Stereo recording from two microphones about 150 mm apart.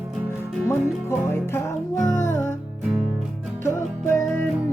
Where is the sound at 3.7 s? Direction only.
15° left (ahead or behind).